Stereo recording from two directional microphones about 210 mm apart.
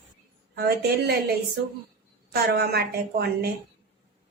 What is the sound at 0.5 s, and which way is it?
Speech, 50° right (ahead or behind).